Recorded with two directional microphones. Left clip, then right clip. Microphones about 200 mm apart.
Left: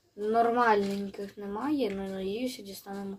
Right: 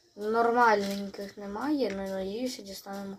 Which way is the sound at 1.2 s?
10° left (ahead or behind).